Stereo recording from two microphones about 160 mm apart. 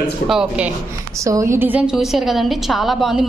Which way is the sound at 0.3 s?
5° right (ahead or behind).